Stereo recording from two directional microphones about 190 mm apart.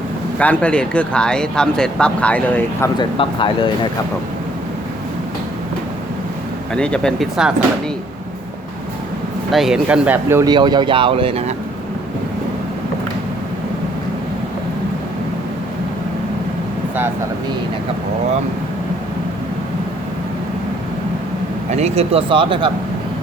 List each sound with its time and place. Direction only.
0.3 s speech: 5° left (ahead or behind)
3.2 s speech: 25° left (ahead or behind)
6.7 s speech: 5° left (ahead or behind)
9.5 s speech: centre (ahead or behind); by 11.5 s 30° right (ahead or behind)
21.7 s speech: 35° right (ahead or behind)